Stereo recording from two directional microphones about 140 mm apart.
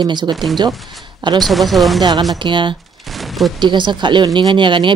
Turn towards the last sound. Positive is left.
turn(degrees=-35)  # may be behind; listen again after turning